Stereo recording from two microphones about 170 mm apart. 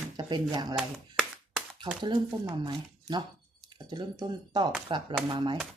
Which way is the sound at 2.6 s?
25° right (ahead or behind).